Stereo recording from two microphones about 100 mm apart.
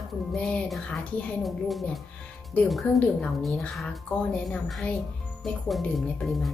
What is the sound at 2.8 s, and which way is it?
Speech, 15° left (ahead or behind).